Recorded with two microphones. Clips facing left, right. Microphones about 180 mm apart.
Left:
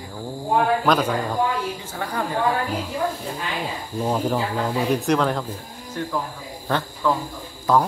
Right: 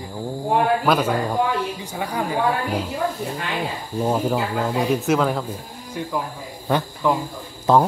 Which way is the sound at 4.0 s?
5° right (ahead or behind).